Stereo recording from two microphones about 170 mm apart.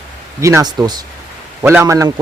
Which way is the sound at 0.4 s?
20° right (ahead or behind).